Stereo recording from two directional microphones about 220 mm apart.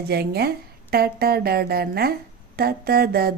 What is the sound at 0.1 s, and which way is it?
Speech, 45° right (ahead or behind).